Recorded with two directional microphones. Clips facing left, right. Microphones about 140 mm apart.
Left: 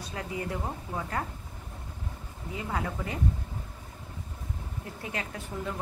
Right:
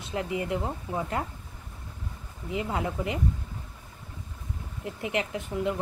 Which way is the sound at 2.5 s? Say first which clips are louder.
Right 4 dB; 20° right (ahead or behind).